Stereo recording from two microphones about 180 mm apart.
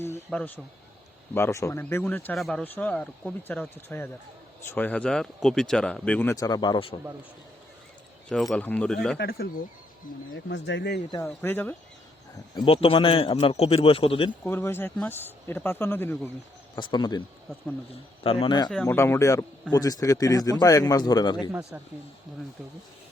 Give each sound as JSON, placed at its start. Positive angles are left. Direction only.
{"t": 0.0, "sound": "a sound", "side_deg": 10}
{"t": 1.3, "sound": "speech", "side_deg": 15}
{"t": 8.3, "sound": "speech", "side_deg": 0}
{"t": 9.1, "sound": "speech", "side_deg": 60}
{"t": 10.3, "sound": "speech", "side_deg": 90}
{"t": 11.4, "sound": "speech", "side_deg": 10}
{"t": 12.5, "sound": "a man's voice", "side_deg": 30}
{"t": 14.4, "sound": "speech", "side_deg": 15}
{"t": 16.7, "sound": "a man's voice", "side_deg": 25}
{"t": 18.7, "sound": "speech", "side_deg": 0}
{"t": 18.9, "sound": "a man's voice", "side_deg": 15}
{"t": 21.5, "sound": "speech", "side_deg": -5}